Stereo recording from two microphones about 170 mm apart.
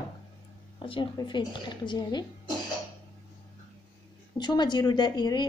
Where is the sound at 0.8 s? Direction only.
30° left (ahead or behind).